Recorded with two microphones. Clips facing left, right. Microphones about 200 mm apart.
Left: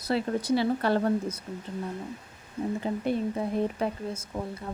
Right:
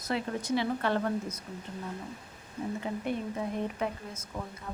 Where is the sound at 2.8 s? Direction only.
35° left (ahead or behind).